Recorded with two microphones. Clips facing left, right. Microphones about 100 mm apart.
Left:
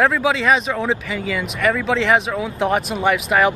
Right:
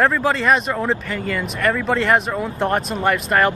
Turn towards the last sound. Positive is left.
turn(degrees=0)  # may be behind; listen again after turning